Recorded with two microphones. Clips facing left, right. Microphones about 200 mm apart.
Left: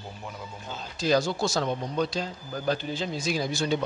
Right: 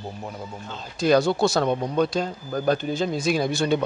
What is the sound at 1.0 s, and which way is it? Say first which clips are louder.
A man's voice: right 6 dB; 60° right (ahead or behind).